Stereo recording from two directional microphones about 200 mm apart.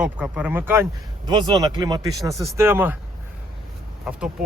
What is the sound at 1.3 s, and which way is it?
Speech, 20° right (ahead or behind).